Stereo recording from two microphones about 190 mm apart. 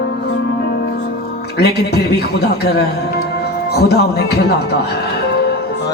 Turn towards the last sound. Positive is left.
turn(degrees=60)  # may be behind; listen again after turning